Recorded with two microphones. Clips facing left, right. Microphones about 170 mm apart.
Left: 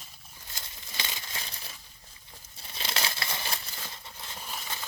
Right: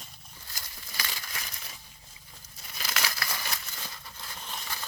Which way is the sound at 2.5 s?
30° left (ahead or behind).